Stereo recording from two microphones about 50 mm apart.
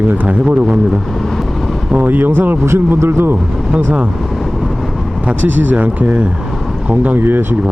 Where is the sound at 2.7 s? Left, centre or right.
Right.